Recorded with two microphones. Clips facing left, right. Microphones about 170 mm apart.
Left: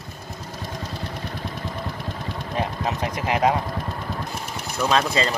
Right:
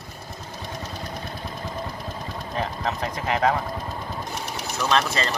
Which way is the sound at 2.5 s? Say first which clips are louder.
Left 2 dB; 15° left (ahead or behind).